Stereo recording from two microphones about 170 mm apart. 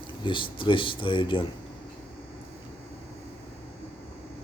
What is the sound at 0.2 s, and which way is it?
Speech, 30° left (ahead or behind).